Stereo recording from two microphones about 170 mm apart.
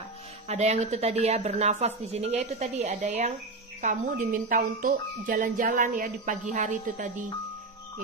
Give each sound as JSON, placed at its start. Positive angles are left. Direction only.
{"t": 0.5, "sound": "a woman's voice", "side_deg": -45}
{"t": 3.8, "sound": "speech", "side_deg": -50}